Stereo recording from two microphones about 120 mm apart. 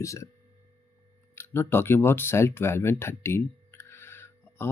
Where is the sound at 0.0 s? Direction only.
25° left (ahead or behind).